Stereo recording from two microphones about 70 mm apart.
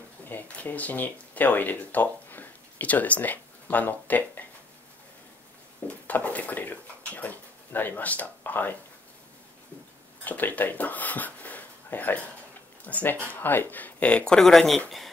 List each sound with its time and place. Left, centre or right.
0.3 s speech: left
5.9 s speech: left
10.2 s speech: left; by 14.8 s centre